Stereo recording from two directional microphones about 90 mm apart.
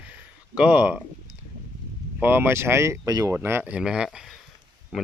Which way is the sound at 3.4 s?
25° right (ahead or behind).